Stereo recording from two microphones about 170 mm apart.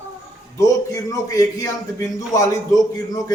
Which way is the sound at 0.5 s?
20° left (ahead or behind).